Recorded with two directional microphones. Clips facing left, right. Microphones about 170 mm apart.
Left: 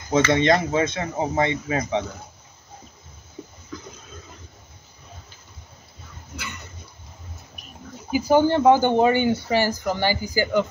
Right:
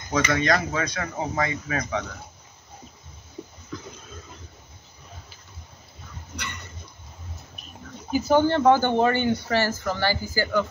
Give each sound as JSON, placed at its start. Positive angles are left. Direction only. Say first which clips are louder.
{"t": 0.3, "sound": "speech", "louder": "left 4 dB", "side_deg": 25}
{"t": 3.7, "sound": "a sound", "louder": "even", "side_deg": 0}
{"t": 6.3, "sound": "dog", "louder": "even", "side_deg": 5}
{"t": 8.1, "sound": "speech", "louder": "left 2 dB", "side_deg": 10}